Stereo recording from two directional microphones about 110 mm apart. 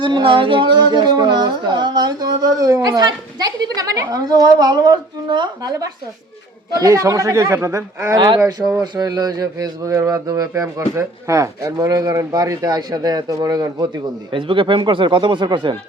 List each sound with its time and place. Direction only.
0.0 s speech: 50° right (ahead or behind)